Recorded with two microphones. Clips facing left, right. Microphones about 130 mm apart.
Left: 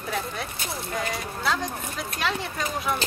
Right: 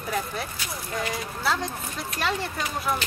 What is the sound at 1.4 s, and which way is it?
Speech, centre (ahead or behind).